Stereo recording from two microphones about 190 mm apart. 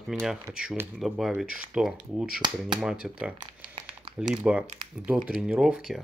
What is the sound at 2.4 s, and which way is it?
Speech, 25° right (ahead or behind).